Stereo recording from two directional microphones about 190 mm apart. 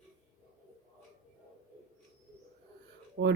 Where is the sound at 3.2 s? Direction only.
90° right.